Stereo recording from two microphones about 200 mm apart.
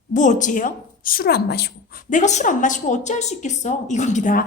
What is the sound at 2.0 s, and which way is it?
A woman's voice, 35° left (ahead or behind).